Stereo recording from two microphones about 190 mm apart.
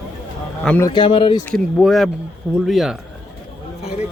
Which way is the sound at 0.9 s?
25° left (ahead or behind).